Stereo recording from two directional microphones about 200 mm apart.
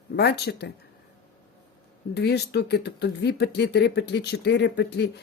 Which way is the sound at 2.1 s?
55° left (ahead or behind).